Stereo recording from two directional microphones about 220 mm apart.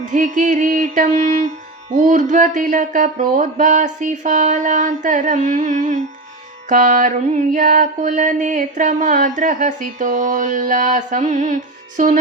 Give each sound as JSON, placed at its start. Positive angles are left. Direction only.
{"t": 0.0, "sound": "mantra", "side_deg": -35}